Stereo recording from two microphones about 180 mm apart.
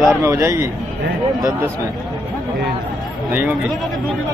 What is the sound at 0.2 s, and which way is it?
Speech, 15° right (ahead or behind).